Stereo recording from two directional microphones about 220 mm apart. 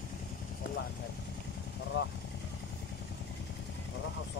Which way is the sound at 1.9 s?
50° left (ahead or behind).